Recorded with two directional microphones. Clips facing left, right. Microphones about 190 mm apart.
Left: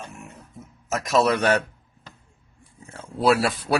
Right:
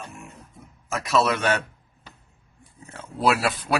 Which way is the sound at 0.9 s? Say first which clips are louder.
Left 2 dB; 40° left (ahead or behind).